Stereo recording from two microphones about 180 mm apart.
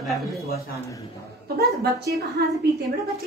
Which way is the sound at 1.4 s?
60° right (ahead or behind).